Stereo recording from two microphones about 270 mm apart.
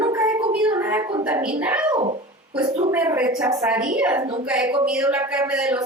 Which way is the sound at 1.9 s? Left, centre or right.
Right.